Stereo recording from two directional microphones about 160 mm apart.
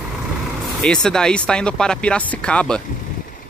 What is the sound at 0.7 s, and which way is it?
Speech, 5° left (ahead or behind).